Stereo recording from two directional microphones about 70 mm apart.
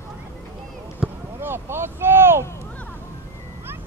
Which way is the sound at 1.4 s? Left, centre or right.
Right.